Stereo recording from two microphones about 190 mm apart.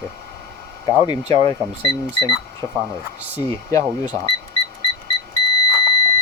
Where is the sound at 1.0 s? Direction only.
20° left (ahead or behind).